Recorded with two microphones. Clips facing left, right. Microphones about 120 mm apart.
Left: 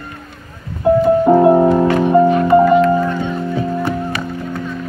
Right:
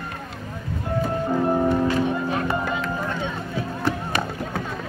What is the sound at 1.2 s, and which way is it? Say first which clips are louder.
Music: left 9 dB; 85° left.